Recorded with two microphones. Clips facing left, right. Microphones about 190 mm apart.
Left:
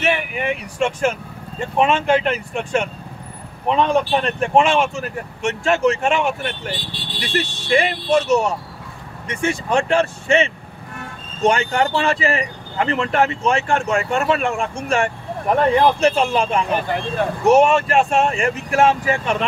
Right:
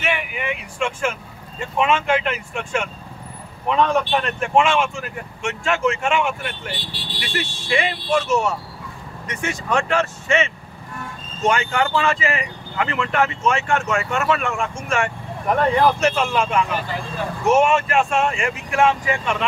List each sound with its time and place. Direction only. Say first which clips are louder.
0.0 s speech: left 4 dB; 40° left (ahead or behind)